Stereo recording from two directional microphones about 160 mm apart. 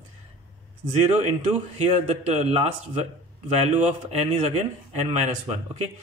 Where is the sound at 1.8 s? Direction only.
45° right (ahead or behind).